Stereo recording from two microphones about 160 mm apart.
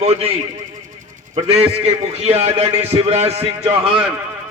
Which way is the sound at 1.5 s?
40° right (ahead or behind).